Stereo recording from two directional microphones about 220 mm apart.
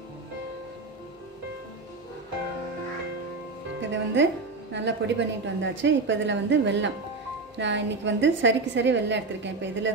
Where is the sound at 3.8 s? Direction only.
55° right (ahead or behind).